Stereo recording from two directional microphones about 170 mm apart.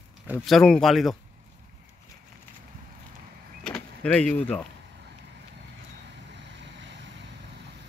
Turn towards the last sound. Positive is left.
turn(degrees=-90)